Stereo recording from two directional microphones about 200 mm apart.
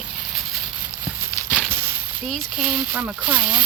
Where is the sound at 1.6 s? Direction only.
5° right (ahead or behind).